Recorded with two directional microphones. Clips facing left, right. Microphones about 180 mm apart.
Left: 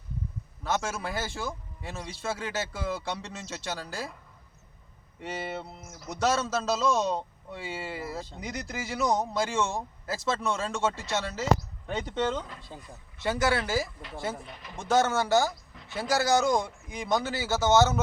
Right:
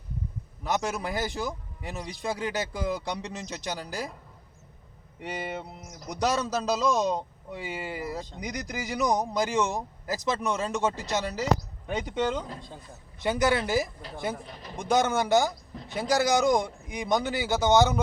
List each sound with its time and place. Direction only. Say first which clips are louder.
0.6 s a man's voice: right 2 dB; 15° right (ahead or behind)
5.2 s a man's voice: right 1 dB; 15° right (ahead or behind)
14.4 s speech: right 2 dB; 35° right (ahead or behind)
14.8 s a man's voice: even; 15° right (ahead or behind)
15.7 s a sound: right 7 dB; 35° right (ahead or behind)
16.0 s a man's voice: right 1 dB; 15° right (ahead or behind)